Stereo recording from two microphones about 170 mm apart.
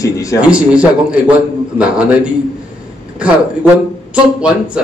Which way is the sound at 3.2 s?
10° right (ahead or behind).